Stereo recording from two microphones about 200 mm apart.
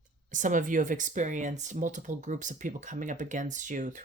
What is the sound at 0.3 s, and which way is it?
Speech, 40° right (ahead or behind).